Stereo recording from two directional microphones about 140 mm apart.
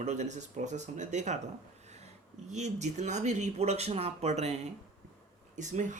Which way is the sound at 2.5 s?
55° right (ahead or behind).